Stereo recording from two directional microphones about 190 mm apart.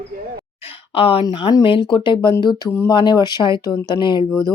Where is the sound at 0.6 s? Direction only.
30° left (ahead or behind).